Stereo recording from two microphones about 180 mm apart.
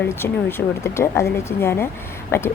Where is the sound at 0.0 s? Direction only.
10° left (ahead or behind).